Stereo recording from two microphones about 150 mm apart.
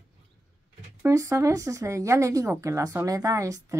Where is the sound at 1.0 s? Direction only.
20° right (ahead or behind).